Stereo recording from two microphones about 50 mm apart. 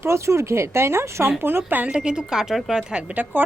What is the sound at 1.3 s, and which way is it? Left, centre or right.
Speech, right.